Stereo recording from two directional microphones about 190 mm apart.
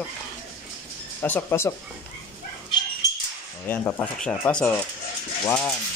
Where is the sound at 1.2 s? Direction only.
10° left (ahead or behind).